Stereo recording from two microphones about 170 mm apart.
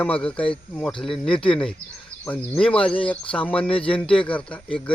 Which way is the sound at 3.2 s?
30° left (ahead or behind).